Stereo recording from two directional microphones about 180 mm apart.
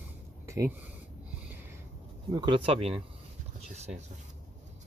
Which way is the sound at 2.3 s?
25° right (ahead or behind).